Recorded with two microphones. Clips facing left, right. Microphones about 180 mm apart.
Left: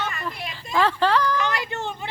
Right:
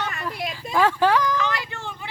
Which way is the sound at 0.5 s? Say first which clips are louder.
Right 1 dB; 10° right (ahead or behind).